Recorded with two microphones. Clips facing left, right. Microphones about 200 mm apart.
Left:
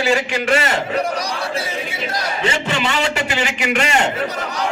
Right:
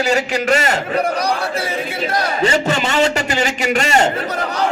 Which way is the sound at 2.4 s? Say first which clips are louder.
Right 3 dB; 40° right (ahead or behind).